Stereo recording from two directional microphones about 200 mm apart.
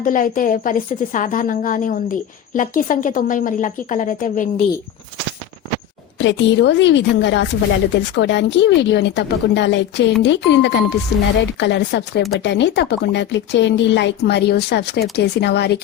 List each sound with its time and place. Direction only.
0.0 s a woman's voice: 40° left (ahead or behind)
6.1 s speech: 65° left (ahead or behind)